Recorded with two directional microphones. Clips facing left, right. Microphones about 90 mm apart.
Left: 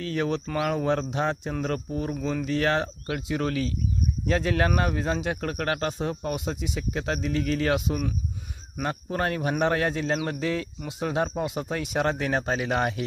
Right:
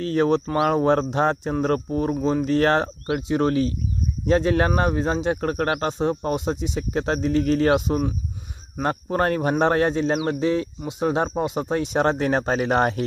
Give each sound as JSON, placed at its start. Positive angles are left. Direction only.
{"t": 0.0, "sound": "a man's voice", "side_deg": -35}
{"t": 3.1, "sound": "a man's voice", "side_deg": -25}